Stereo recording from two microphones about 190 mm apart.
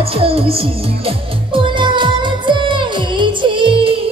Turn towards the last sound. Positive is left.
turn(degrees=-25)  # may be behind; listen again after turning